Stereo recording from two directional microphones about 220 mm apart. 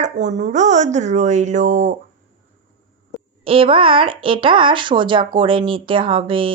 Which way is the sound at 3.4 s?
25° right (ahead or behind).